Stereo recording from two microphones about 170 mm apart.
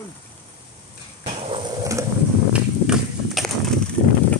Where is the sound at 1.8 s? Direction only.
20° right (ahead or behind).